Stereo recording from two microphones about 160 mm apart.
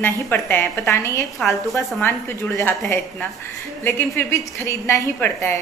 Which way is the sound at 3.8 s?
15° left (ahead or behind).